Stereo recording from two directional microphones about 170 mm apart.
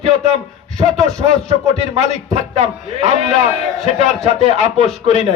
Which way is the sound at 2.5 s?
40° right (ahead or behind).